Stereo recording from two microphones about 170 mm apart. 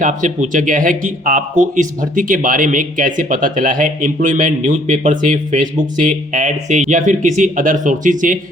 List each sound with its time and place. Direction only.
0.0 s speech: 45° right (ahead or behind)